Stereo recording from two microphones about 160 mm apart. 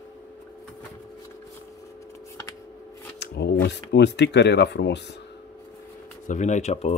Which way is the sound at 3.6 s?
90° left.